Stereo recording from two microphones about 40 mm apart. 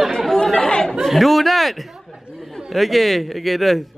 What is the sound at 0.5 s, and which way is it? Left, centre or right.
Chatter, left.